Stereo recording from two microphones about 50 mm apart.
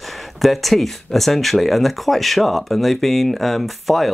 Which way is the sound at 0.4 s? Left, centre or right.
Centre.